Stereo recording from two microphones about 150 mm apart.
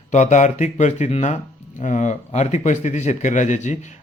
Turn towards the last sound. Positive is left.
turn(degrees=50)  # may be behind; listen again after turning